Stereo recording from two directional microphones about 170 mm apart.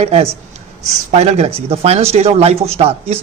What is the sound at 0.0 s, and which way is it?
A man's voice, 35° right (ahead or behind).